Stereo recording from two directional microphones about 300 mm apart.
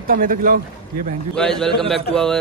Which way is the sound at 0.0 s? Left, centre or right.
Right.